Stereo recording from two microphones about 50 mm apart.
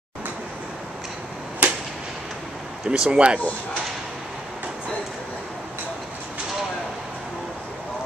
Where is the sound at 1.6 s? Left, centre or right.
Right.